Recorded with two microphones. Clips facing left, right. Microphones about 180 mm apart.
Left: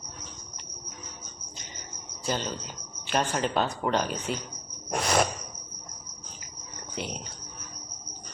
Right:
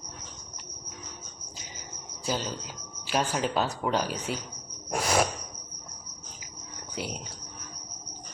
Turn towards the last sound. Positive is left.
turn(degrees=-5)  # may be behind; listen again after turning